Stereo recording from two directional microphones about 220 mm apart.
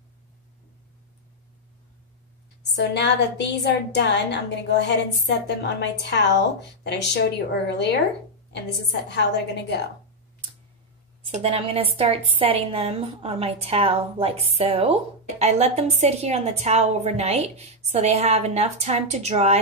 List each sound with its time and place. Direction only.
2.7 s a woman's voice: 50° left (ahead or behind)
11.2 s a woman's voice: 25° right (ahead or behind)